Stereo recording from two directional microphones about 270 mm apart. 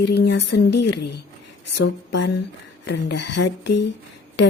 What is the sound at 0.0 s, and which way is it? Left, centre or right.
Speech, left.